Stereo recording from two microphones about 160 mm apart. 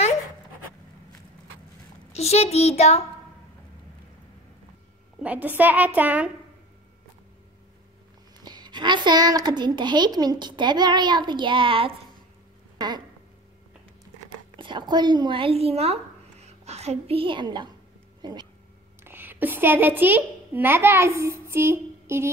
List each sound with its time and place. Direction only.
2.1 s a child's voice: 40° left (ahead or behind)
5.2 s a child's voice: 10° right (ahead or behind)
8.4 s a child's voice: 25° right (ahead or behind)
12.7 s a sound: 25° right (ahead or behind)
14.6 s speech: 30° right (ahead or behind)
19.0 s a child's voice: 10° right (ahead or behind)